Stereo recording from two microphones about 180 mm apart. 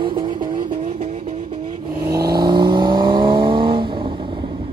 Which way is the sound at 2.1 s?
60° right (ahead or behind).